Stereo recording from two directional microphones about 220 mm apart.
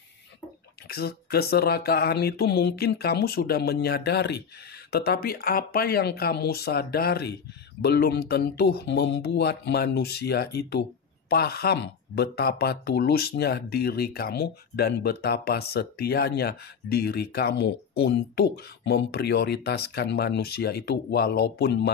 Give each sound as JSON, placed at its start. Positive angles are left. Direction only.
{"t": 0.8, "sound": "speech", "side_deg": 45}